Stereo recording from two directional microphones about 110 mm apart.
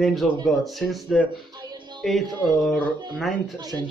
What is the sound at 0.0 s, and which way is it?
Speech, centre (ahead or behind).